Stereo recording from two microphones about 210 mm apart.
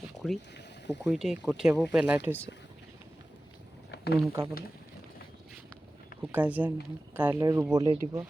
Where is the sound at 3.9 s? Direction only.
50° left (ahead or behind).